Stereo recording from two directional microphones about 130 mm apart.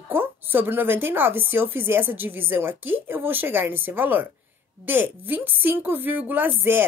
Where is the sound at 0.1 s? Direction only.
15° right (ahead or behind).